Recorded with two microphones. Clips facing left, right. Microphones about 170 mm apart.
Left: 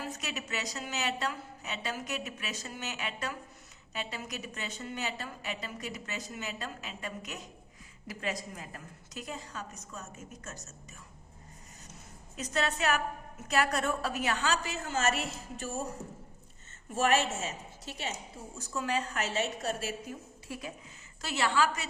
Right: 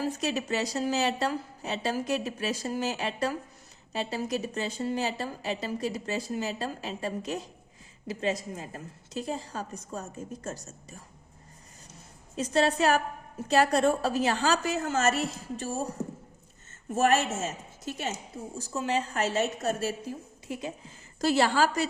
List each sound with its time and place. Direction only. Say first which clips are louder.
0.0 s a woman's voice: right 9 dB; 30° right (ahead or behind)
12.4 s a woman's voice: right 7 dB; 30° right (ahead or behind)
16.9 s a woman's voice: right 4 dB; 40° right (ahead or behind)
18.5 s a woman's voice: right 4 dB; 30° right (ahead or behind)
20.5 s a woman's voice: right 6 dB; 25° right (ahead or behind)
21.2 s a woman's voice: right 6 dB; 35° right (ahead or behind)